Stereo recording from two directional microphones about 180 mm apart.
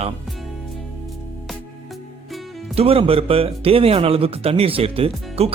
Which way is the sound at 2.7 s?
35° right (ahead or behind).